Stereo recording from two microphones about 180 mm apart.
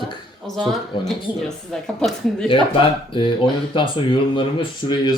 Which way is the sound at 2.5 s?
30° left (ahead or behind).